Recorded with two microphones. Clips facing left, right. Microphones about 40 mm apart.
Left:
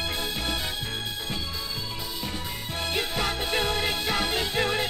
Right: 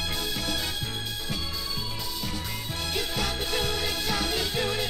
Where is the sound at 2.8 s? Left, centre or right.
Left.